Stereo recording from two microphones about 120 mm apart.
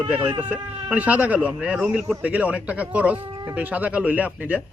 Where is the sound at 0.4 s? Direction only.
10° right (ahead or behind).